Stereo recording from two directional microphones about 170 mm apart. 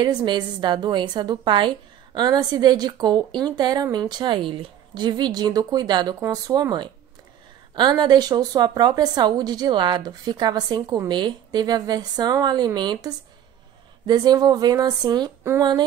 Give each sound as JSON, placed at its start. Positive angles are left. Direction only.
{"t": 0.0, "sound": "a woman's voice", "side_deg": -25}